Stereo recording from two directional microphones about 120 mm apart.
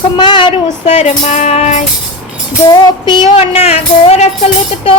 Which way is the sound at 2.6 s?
40° left (ahead or behind).